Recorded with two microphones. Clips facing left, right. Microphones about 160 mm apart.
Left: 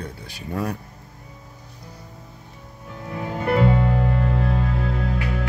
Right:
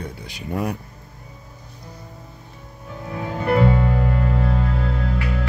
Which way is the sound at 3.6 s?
20° left (ahead or behind).